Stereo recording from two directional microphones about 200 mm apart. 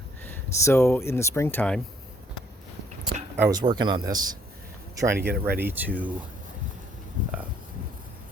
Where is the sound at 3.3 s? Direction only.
15° right (ahead or behind).